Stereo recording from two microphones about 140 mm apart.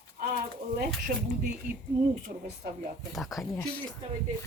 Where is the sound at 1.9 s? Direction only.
90° right.